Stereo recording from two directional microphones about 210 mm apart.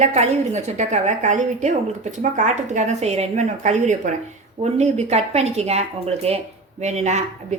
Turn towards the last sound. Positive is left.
turn(degrees=-30)  # may be behind; listen again after turning